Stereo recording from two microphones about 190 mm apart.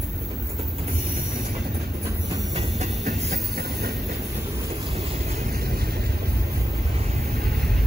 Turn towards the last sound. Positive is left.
turn(degrees=-55)  # may be behind; listen again after turning